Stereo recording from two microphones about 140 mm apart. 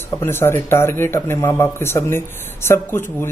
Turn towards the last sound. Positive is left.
turn(degrees=15)  # may be behind; listen again after turning